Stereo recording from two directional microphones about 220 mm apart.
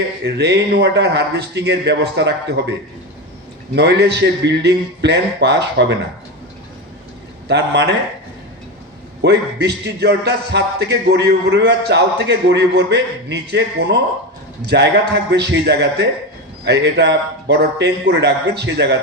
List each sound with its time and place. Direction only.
0.3 s speech: 50° right (ahead or behind)
3.8 s speech: 50° right (ahead or behind)
7.4 s speech: 50° right (ahead or behind)
9.2 s speech: 50° right (ahead or behind)